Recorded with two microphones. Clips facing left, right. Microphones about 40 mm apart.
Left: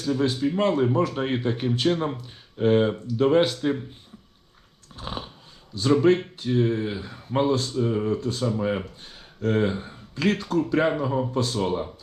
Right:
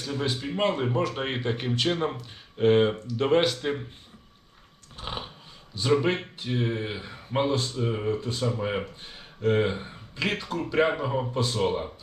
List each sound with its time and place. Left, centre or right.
0.0 s speech: centre
4.9 s a sound: centre
5.7 s speech: centre